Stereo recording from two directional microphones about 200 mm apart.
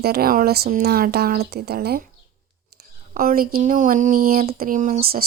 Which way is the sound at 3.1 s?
45° right (ahead or behind).